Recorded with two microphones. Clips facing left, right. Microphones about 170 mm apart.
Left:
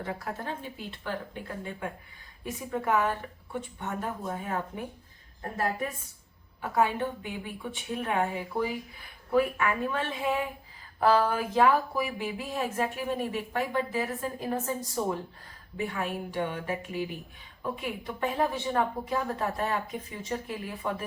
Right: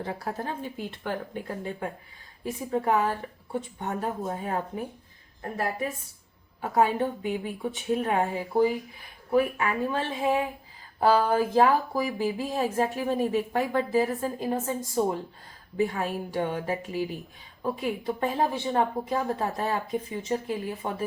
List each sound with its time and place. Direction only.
0.0 s speech: 35° right (ahead or behind)
1.5 s speech: 35° right (ahead or behind)
6.6 s speech: 40° right (ahead or behind)
15.9 s speech: 40° right (ahead or behind)